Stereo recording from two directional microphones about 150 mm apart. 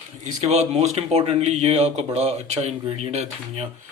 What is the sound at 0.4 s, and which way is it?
Speech, 45° right (ahead or behind).